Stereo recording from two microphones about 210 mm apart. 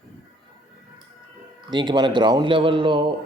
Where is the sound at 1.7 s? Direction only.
20° right (ahead or behind).